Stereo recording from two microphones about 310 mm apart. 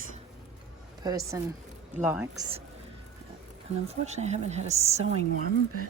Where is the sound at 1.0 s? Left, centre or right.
Centre.